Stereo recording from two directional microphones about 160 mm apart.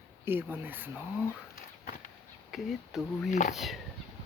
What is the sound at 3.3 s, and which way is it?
Speech, 50° left (ahead or behind).